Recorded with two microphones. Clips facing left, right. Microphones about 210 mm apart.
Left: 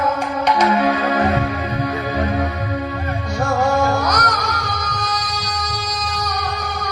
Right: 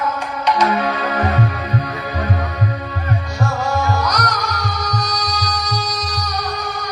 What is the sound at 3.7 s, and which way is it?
Music, 50° left (ahead or behind).